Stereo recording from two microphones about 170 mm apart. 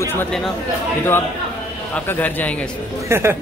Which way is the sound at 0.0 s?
15° left (ahead or behind).